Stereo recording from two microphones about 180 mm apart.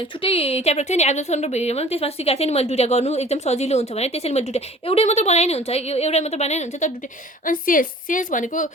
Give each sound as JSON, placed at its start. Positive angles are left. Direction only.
{"t": 0.2, "sound": "a woman's voice", "side_deg": 30}